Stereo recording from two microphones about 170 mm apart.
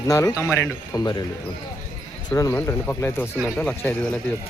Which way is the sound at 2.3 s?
15° left (ahead or behind).